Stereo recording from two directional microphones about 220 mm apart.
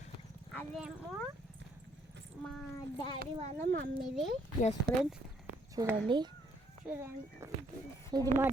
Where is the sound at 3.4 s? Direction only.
35° right (ahead or behind).